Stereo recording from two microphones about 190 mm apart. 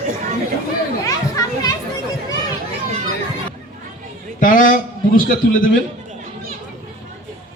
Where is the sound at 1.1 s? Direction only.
20° left (ahead or behind).